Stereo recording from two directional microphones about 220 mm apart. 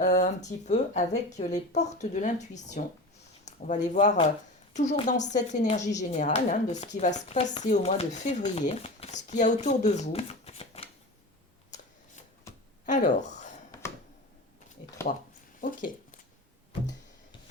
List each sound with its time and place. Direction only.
0.0 s speech: 35° left (ahead or behind)
12.8 s speech: 35° left (ahead or behind)
15.1 s speech: 35° left (ahead or behind)